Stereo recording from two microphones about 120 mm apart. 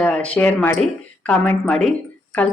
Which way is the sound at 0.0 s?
10° left (ahead or behind).